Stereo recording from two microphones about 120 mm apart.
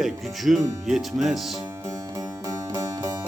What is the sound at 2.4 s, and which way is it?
Music, 30° right (ahead or behind).